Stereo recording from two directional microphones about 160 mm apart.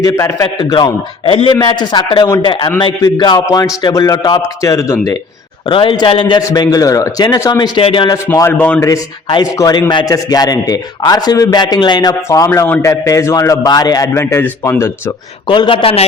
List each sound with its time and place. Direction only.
0.0 s a man's voice: 20° left (ahead or behind)
2.5 s a man's voice: 30° left (ahead or behind)
5.6 s a man's voice: 30° left (ahead or behind)
7.8 s a man's voice: 35° left (ahead or behind)
8.3 s a man's voice: 10° left (ahead or behind)
8.9 s a man's voice: 20° left (ahead or behind)
15.4 s a man's voice: 30° left (ahead or behind)